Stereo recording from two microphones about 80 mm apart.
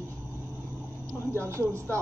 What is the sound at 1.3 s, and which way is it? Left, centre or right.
Speech, right.